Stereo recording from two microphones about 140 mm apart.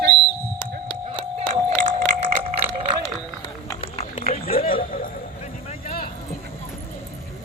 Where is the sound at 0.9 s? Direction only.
35° left (ahead or behind).